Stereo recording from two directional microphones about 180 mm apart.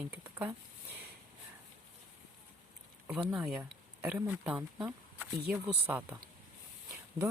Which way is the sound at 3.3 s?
5° right (ahead or behind).